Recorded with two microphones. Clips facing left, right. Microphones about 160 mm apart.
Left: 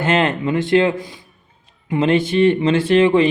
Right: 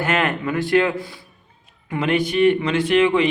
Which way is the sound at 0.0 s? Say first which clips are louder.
Left 4 dB; 25° left (ahead or behind).